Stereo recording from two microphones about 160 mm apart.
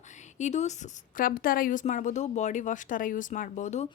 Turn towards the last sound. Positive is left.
turn(degrees=50)  # may be behind; listen again after turning